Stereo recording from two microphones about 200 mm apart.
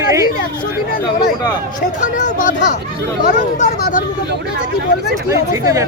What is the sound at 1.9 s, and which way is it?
Speech, 40° left (ahead or behind).